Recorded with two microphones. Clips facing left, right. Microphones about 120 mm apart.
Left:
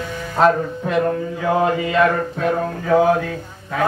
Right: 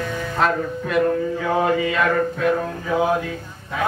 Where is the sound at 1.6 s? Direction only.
30° left (ahead or behind).